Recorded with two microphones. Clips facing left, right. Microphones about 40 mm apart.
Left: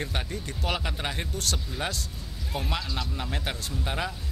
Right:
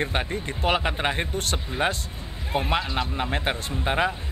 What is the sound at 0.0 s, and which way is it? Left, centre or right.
Speech, right.